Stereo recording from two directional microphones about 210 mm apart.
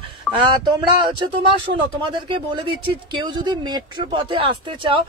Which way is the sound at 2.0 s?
20° right (ahead or behind).